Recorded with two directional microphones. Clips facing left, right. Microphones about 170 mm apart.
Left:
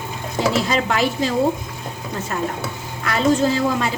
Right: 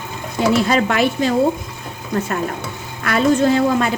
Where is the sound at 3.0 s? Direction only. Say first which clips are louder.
Right 3 dB; 60° right (ahead or behind).